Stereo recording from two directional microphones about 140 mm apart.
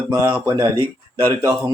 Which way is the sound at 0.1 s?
20° right (ahead or behind).